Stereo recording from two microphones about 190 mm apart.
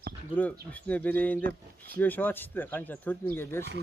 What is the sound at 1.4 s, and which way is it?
Speech, 50° right (ahead or behind).